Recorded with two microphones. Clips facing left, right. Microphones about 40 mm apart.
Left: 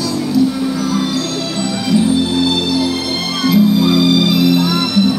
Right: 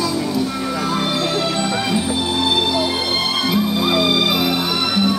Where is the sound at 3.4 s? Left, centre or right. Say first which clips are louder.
Left 10 dB; centre.